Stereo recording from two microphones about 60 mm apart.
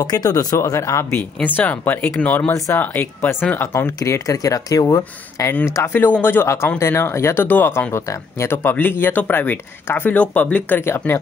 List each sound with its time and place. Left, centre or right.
0.1 s speech: left
0.6 s speech: left
1.1 s speech: left
3.6 s speech: left
5.7 s speech: left
6.2 s speech: left
7.4 s speech: left
7.9 s speech: left
10.8 s speech: left